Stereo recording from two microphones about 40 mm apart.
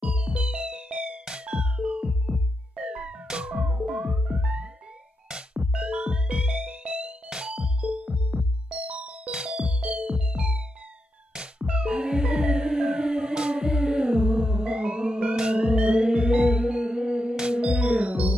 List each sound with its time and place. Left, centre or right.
0.0 s music: right
5.7 s music: right